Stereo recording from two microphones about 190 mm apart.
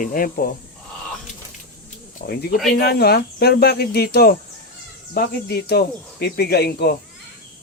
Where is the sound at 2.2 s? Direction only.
55° left (ahead or behind).